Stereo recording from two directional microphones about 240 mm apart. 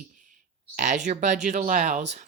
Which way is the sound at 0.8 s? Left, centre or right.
Right.